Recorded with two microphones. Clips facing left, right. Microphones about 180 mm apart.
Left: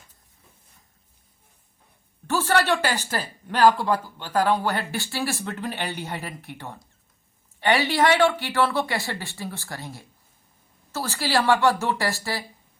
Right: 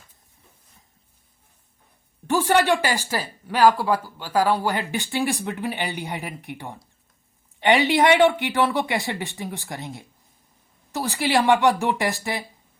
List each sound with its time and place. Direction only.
2.2 s speech: 15° right (ahead or behind)